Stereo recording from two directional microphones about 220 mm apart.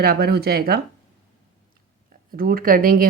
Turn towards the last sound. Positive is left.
turn(degrees=-40)  # may be behind; listen again after turning